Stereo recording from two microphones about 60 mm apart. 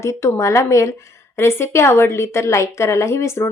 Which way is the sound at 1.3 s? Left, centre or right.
Left.